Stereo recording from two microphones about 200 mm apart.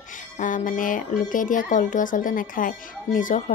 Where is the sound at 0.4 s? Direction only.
40° left (ahead or behind).